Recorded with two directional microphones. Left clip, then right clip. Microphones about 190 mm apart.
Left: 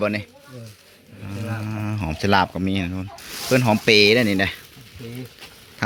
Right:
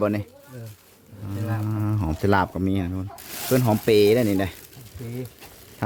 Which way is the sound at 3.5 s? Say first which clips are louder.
Left 3 dB; 5° right (ahead or behind).